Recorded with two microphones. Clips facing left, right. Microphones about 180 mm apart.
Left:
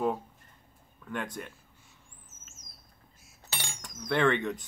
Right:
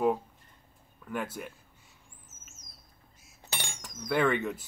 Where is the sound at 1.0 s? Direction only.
5° right (ahead or behind).